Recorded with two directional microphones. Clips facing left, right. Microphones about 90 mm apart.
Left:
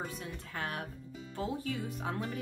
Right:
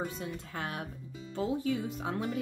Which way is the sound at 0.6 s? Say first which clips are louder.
Left 1 dB; 20° right (ahead or behind).